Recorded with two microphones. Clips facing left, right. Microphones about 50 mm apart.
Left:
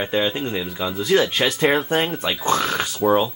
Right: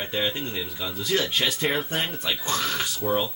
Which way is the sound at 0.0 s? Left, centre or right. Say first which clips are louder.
Left 6 dB; centre.